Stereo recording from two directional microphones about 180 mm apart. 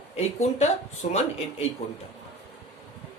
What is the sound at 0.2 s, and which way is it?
Speech, 40° left (ahead or behind).